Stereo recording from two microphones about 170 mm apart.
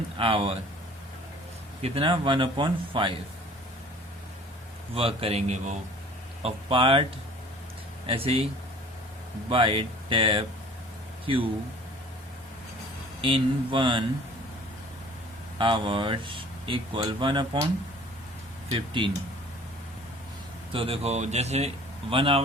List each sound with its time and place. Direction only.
0.2 s speech: 30° right (ahead or behind)
1.8 s speech: 30° right (ahead or behind)
4.9 s speech: 35° right (ahead or behind)
8.0 s speech: 35° right (ahead or behind)
9.5 s speech: 30° right (ahead or behind)
13.2 s speech: 30° right (ahead or behind)
15.5 s speech: 30° right (ahead or behind)
18.7 s speech: 30° right (ahead or behind)
20.7 s speech: 35° right (ahead or behind)